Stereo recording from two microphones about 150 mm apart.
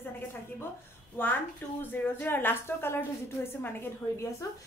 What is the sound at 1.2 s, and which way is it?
Speech, 15° left (ahead or behind).